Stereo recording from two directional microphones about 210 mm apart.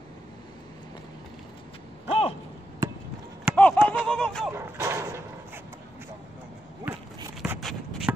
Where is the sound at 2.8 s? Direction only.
15° right (ahead or behind).